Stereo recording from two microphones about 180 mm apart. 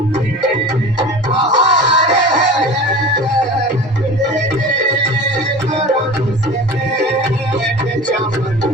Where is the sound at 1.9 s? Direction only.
40° right (ahead or behind).